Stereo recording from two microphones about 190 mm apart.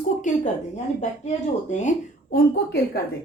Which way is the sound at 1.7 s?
40° left (ahead or behind).